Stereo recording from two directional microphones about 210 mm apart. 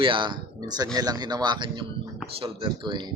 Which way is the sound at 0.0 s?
25° right (ahead or behind).